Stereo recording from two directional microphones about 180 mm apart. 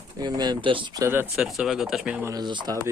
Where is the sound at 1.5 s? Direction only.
Centre (ahead or behind).